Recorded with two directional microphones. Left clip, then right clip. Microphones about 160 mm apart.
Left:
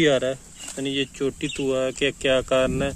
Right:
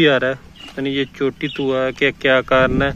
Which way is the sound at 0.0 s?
10° left (ahead or behind).